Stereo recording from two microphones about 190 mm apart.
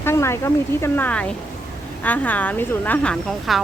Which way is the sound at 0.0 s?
15° left (ahead or behind).